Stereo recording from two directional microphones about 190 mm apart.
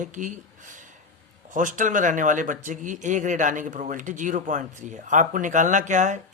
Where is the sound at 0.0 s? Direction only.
40° right (ahead or behind).